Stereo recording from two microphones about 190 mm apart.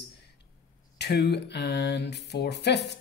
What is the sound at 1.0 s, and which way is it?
Speech, 60° left (ahead or behind).